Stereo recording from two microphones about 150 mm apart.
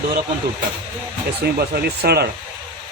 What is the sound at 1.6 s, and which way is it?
Speech, 90° right.